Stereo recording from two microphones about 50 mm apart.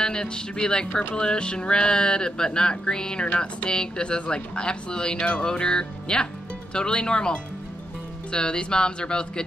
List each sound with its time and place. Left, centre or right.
0.0 s speech: centre